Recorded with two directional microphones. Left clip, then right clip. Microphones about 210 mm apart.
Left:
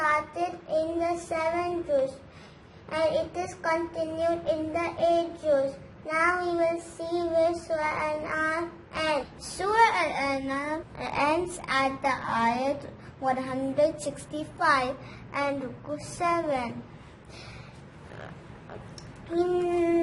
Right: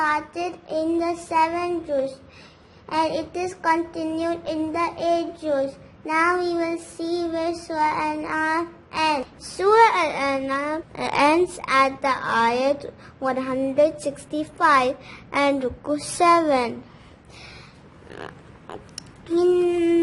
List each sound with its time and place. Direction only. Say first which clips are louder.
0.0 s child singing: right 3 dB; 50° right (ahead or behind)
2.9 s child singing: right 3 dB; 45° right (ahead or behind)
9.4 s child singing: right 7 dB; 35° right (ahead or behind)
15.3 s a woman's voice: right 8 dB; 50° right (ahead or behind)
16.2 s child singing: right 10 dB; 55° right (ahead or behind)
18.9 s speech: right 6 dB; 50° right (ahead or behind)